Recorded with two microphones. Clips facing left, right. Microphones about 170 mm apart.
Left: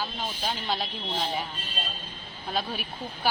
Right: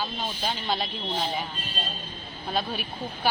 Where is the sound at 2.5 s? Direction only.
5° left (ahead or behind).